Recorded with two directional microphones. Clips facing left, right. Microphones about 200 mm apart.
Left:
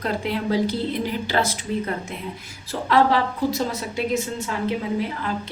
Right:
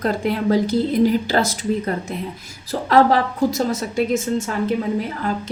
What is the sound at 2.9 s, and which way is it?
A woman's voice, 45° right (ahead or behind).